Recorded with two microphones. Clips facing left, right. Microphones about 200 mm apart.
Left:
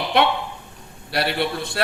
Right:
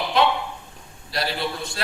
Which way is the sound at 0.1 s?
60° left (ahead or behind).